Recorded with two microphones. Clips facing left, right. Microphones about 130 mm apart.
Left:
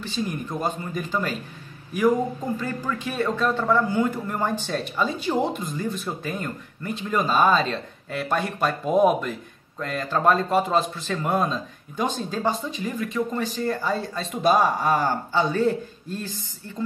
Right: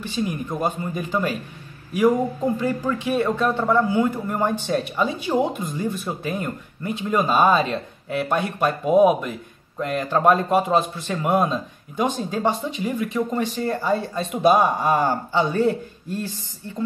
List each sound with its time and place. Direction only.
0.1 s speech: 15° right (ahead or behind)
2.6 s speech: 20° right (ahead or behind)